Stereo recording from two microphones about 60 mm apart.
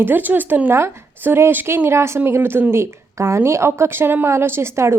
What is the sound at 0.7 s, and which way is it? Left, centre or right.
Speech, right.